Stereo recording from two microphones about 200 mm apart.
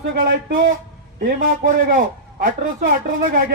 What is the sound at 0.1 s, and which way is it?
A woman's voice, 45° right (ahead or behind).